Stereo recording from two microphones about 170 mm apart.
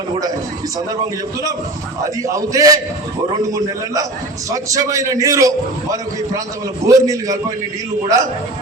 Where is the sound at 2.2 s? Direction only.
20° right (ahead or behind).